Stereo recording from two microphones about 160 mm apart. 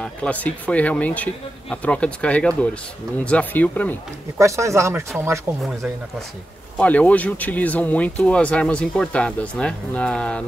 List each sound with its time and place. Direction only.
0.0 s speech: 10° left (ahead or behind)
4.4 s speech: 20° right (ahead or behind)
5.6 s speech: centre (ahead or behind)